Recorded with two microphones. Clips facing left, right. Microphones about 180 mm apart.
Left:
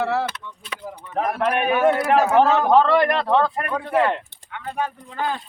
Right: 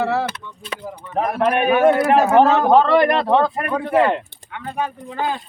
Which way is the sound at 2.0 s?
50° right (ahead or behind).